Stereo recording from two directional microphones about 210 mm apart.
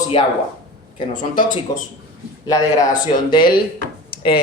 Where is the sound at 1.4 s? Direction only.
40° left (ahead or behind).